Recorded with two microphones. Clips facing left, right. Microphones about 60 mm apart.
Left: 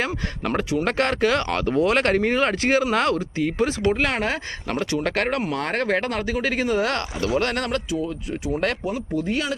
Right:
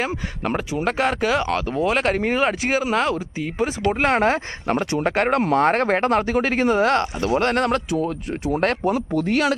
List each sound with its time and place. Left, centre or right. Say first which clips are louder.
0.4 s speech: even; centre
3.9 s speech: right 5 dB; right
5.5 s speech: right 5 dB; right
7.9 s speech: right 3 dB; right